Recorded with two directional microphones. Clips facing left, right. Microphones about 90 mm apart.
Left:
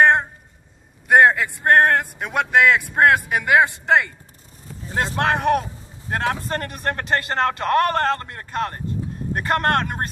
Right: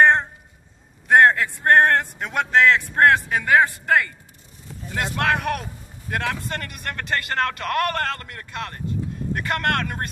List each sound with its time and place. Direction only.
0.0 s a sound: 10° left (ahead or behind)
1.0 s a man's voice: 10° left (ahead or behind)
4.8 s a man's voice: 30° left (ahead or behind)